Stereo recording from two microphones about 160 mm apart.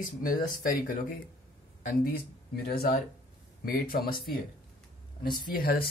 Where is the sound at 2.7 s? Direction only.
70° left (ahead or behind).